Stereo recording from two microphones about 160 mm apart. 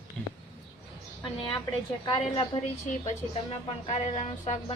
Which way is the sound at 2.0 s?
30° left (ahead or behind).